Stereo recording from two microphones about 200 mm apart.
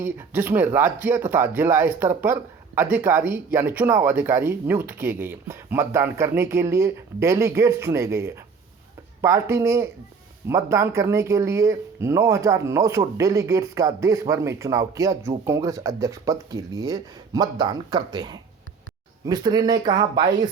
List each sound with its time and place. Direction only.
0.0 s speech: 10° right (ahead or behind)